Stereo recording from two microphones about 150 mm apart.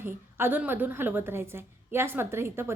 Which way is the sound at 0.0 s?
15° right (ahead or behind).